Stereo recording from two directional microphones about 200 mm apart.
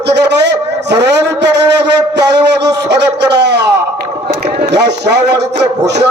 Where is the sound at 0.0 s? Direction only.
60° right (ahead or behind).